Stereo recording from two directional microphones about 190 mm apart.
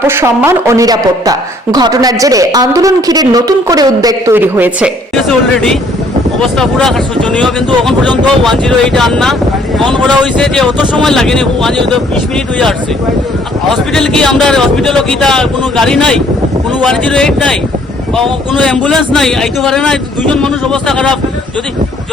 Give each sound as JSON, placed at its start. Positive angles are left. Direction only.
{"t": 0.1, "sound": "a man's voice", "side_deg": -15}
{"t": 6.4, "sound": "a man's voice", "side_deg": 0}
{"t": 8.4, "sound": "a man's voice", "side_deg": 5}
{"t": 13.9, "sound": "a man's voice", "side_deg": 5}